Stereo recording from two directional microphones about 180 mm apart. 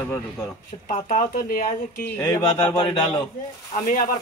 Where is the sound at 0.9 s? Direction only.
45° left (ahead or behind).